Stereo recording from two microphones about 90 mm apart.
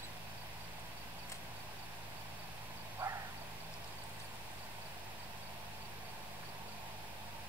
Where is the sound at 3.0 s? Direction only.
20° right (ahead or behind).